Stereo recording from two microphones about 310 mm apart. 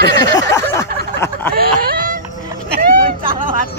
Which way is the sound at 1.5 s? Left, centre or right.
Right.